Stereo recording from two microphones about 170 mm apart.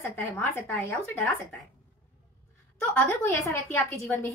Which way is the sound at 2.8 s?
15° left (ahead or behind).